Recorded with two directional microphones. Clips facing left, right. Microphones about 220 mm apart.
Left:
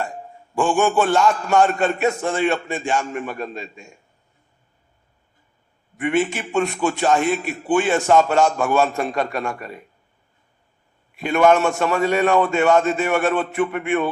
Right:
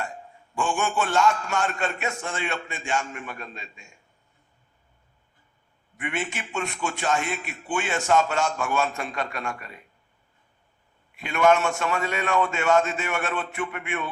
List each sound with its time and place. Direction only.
0.5 s a man's voice: 35° left (ahead or behind)
6.0 s a man's voice: 35° left (ahead or behind)
11.2 s a man's voice: 35° left (ahead or behind)